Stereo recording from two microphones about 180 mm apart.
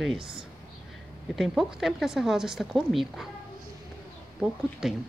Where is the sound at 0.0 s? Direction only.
Centre (ahead or behind).